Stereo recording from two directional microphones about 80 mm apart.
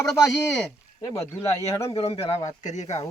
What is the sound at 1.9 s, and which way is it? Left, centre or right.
Speech, left.